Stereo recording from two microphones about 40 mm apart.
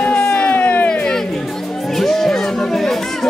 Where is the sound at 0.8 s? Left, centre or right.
Left.